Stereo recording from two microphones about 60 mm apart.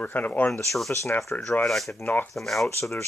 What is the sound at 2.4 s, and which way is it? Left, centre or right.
Rub, centre.